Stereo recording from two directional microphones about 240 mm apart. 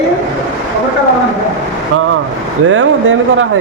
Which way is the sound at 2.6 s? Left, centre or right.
Right.